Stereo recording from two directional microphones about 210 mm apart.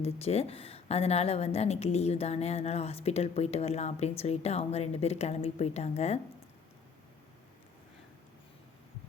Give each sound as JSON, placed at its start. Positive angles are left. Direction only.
{"t": 0.0, "sound": "a woman's voice", "side_deg": 30}